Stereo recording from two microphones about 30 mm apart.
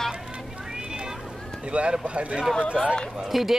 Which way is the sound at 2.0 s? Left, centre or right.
Right.